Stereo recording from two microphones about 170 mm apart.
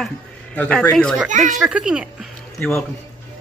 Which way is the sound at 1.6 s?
5° right (ahead or behind).